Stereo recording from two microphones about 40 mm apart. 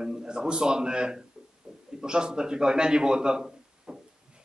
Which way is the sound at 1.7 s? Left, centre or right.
Centre.